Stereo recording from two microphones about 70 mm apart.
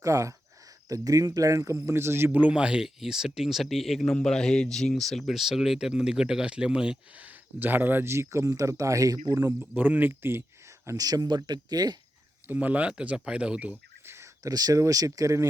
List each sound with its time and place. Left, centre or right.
0.0 s speech: right
1.9 s speech: right
2.3 s speech: centre; by 9.3 s right
9.3 s speech: right
9.7 s speech: right
10.8 s speech: right
12.5 s speech: right
14.0 s whispering: right
14.4 s speech: right